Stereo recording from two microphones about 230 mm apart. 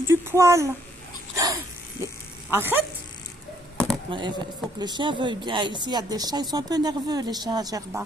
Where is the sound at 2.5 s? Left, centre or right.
Centre.